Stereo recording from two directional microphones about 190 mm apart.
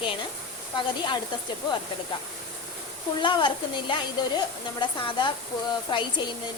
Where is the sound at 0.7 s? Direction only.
25° left (ahead or behind).